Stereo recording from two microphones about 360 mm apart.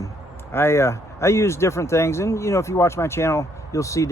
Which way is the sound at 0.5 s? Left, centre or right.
Centre.